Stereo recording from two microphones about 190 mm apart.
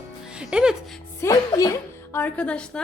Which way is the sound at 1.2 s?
20° left (ahead or behind).